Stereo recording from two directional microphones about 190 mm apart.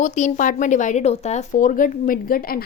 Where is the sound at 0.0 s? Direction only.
40° left (ahead or behind).